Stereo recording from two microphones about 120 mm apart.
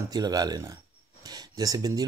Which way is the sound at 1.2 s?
35° right (ahead or behind).